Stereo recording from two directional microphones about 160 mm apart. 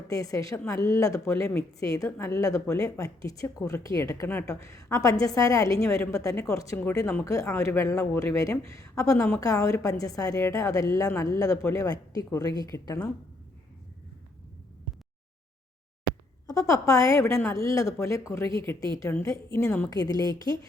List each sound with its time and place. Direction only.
0.1 s a woman's voice: 20° left (ahead or behind)
16.5 s a woman's voice: 20° left (ahead or behind)
19.6 s a woman's voice: 5° left (ahead or behind)